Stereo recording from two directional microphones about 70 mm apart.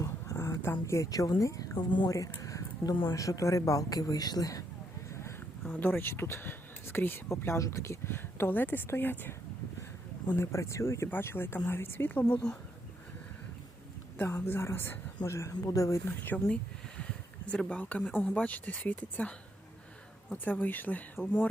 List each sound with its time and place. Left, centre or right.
0.4 s a sound: left
0.9 s a woman's voice: left
2.4 s a sound: left
3.2 s a woman's voice: left
5.8 s speech: left
7.3 s speech: left
10.3 s speech: left
14.2 s speech: left
16.0 s speech: left
17.0 s a sound: centre
18.1 s speech: left
20.3 s speech: left